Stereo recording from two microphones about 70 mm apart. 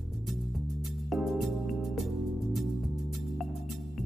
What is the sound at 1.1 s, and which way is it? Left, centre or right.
Music, centre.